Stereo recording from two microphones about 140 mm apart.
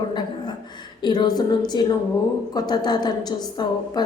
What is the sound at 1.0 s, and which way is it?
A woman's voice, 30° left (ahead or behind).